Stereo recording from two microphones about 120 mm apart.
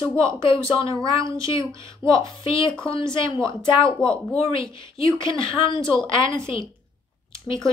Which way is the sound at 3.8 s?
5° left (ahead or behind).